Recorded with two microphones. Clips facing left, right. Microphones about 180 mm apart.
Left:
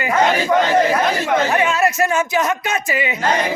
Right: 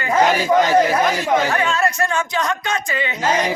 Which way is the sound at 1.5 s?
20° left (ahead or behind).